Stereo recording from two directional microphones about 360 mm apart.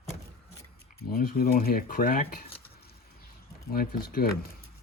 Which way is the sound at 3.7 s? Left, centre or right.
Left.